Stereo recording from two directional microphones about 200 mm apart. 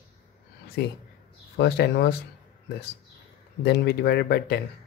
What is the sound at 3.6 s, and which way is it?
Speech, 55° left (ahead or behind).